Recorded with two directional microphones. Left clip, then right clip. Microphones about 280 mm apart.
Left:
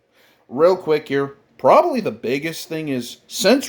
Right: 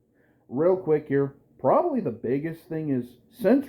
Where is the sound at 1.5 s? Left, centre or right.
Left.